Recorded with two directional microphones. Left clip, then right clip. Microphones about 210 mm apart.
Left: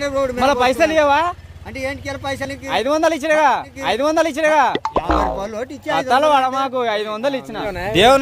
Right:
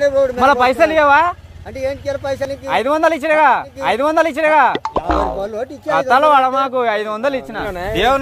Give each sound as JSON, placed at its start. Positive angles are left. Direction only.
{"t": 0.0, "sound": "speech", "side_deg": 45}
{"t": 0.4, "sound": "speech", "side_deg": 0}
{"t": 1.8, "sound": "speech", "side_deg": 45}
{"t": 2.7, "sound": "speech", "side_deg": -5}
{"t": 7.9, "sound": "speech", "side_deg": 45}